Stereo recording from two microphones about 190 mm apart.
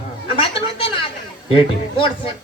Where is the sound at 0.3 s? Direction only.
30° left (ahead or behind).